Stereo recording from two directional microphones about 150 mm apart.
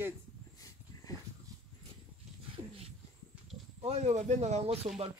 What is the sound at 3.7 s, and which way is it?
Speech, 45° right (ahead or behind).